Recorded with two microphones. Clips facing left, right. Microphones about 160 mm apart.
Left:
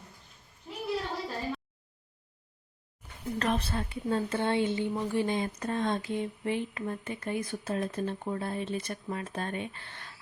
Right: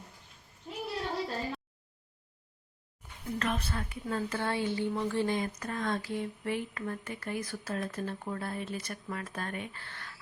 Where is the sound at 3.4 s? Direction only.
35° left (ahead or behind).